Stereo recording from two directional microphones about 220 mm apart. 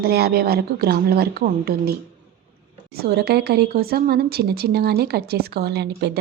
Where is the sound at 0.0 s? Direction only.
45° right (ahead or behind).